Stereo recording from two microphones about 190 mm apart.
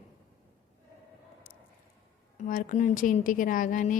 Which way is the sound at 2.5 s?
40° left (ahead or behind).